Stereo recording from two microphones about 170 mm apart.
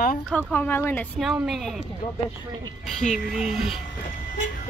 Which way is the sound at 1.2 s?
Centre (ahead or behind).